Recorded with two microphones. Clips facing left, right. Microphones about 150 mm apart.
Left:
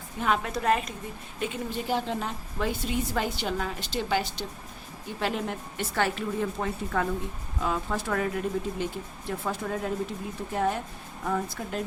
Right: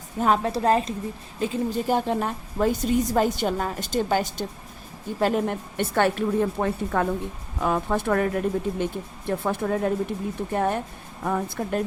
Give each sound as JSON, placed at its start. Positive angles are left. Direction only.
{"t": 0.2, "sound": "a woman's voice", "side_deg": -35}
{"t": 1.9, "sound": "a woman's voice", "side_deg": -50}